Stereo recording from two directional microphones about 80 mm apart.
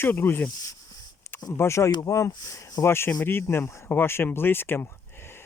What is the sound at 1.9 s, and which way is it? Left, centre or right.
Speech, left.